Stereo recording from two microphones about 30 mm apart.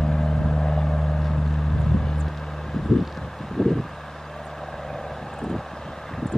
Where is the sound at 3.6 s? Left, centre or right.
Centre.